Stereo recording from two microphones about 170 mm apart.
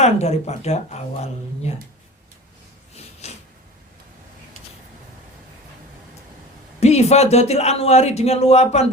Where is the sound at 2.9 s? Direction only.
40° left (ahead or behind).